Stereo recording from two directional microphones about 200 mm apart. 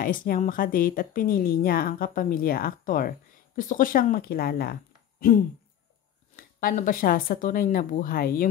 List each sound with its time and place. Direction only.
0.0 s speech: 45° left (ahead or behind)
6.3 s speech: 45° left (ahead or behind)